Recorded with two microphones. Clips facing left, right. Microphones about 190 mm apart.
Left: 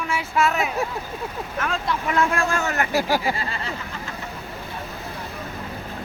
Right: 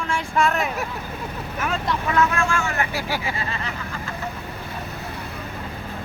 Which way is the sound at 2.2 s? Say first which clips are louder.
Right 1 dB; 35° left (ahead or behind).